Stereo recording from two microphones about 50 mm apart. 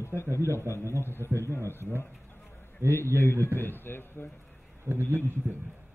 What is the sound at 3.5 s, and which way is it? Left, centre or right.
Speech, left.